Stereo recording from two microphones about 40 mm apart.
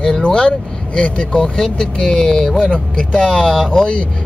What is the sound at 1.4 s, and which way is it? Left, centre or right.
Speech, centre.